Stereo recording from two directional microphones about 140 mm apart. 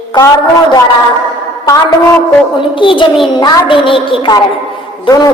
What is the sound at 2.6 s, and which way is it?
A man's voice, 35° left (ahead or behind).